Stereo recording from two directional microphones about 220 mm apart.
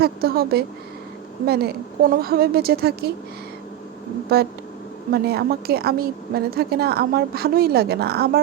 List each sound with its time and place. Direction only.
0.0 s a woman's voice: 45° right (ahead or behind)
4.3 s a woman's voice: 45° right (ahead or behind)